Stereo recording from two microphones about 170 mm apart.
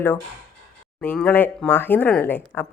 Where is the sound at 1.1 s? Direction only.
10° left (ahead or behind).